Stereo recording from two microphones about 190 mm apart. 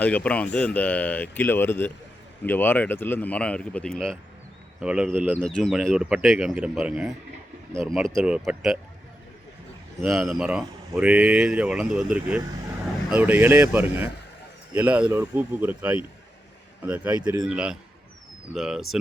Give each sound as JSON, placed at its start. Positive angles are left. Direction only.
{"t": 0.0, "sound": "speech", "side_deg": 5}
{"t": 5.4, "sound": "speech", "side_deg": 0}
{"t": 10.0, "sound": "speech", "side_deg": 0}
{"t": 17.4, "sound": "speech", "side_deg": -5}